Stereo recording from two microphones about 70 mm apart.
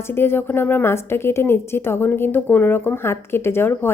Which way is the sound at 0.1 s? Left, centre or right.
Left.